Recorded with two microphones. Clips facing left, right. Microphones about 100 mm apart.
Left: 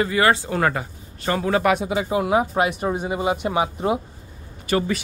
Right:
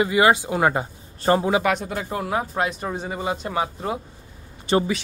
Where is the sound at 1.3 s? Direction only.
30° right (ahead or behind).